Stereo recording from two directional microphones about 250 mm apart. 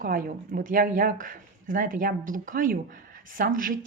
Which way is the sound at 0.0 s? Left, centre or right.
Right.